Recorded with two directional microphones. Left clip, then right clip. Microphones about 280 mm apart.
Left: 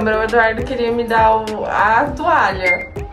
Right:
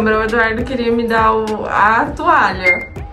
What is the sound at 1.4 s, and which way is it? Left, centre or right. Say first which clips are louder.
Speech: right 2 dB; centre.